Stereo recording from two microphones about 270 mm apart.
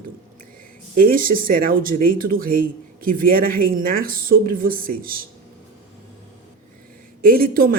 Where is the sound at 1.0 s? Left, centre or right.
Right.